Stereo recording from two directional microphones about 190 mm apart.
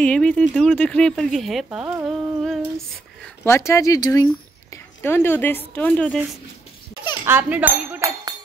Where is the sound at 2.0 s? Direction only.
Centre (ahead or behind).